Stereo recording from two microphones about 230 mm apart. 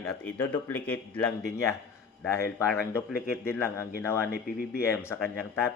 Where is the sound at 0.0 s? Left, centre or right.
Centre.